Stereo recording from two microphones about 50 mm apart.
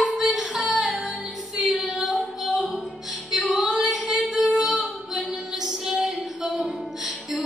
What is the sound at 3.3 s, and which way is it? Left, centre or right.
Female singing, centre.